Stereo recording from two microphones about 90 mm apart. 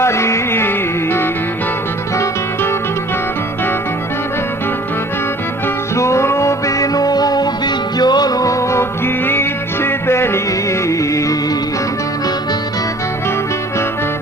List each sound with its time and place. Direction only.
0.0 s music: 30° left (ahead or behind)
6.0 s music: 30° left (ahead or behind)